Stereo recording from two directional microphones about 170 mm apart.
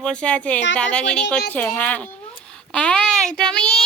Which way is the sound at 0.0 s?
5° left (ahead or behind).